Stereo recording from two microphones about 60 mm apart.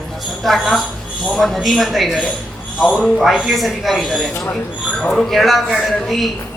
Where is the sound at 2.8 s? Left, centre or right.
Centre.